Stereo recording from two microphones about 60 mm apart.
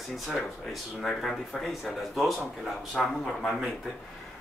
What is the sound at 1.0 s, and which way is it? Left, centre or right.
Speech, centre.